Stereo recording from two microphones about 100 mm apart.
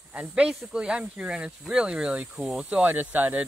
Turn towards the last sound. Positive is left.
turn(degrees=-15)  # may be behind; listen again after turning